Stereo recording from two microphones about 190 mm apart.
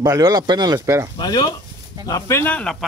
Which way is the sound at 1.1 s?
25° left (ahead or behind).